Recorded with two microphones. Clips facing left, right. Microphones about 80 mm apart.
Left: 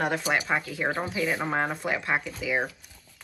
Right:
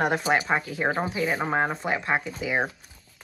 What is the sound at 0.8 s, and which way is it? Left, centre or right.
Speech, centre.